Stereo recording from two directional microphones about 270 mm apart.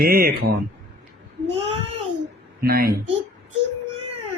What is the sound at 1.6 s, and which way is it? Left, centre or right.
Child singing, right.